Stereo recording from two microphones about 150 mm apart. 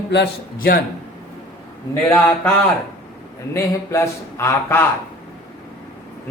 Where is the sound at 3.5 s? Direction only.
20° left (ahead or behind).